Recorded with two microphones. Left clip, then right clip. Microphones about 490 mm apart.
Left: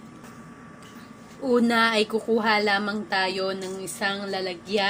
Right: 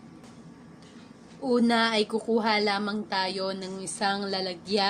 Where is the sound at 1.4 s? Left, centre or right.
Right.